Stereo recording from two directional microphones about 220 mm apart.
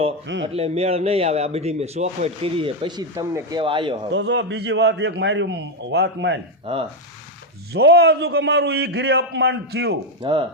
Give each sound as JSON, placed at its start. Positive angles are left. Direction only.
{"t": 0.5, "sound": "a man's voice", "side_deg": -30}
{"t": 4.1, "sound": "a man's voice", "side_deg": -55}
{"t": 7.7, "sound": "a man's voice", "side_deg": -45}
{"t": 10.2, "sound": "a man's voice", "side_deg": -25}